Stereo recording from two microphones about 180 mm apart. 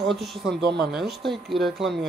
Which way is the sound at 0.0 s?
Centre (ahead or behind).